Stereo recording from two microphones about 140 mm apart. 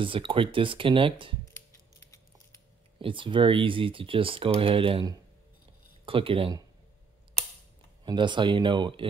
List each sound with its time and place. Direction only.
0.0 s speech: 40° right (ahead or behind)
3.0 s speech: 40° right (ahead or behind)
6.0 s speech: 40° right (ahead or behind)
8.0 s speech: 35° right (ahead or behind)